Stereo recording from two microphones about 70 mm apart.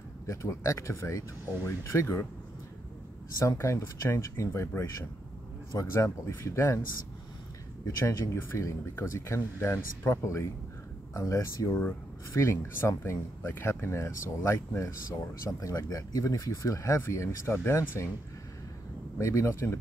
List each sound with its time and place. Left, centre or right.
0.3 s speech: left
3.3 s speech: left
7.8 s speech: left
15.6 s speech: left
19.1 s speech: left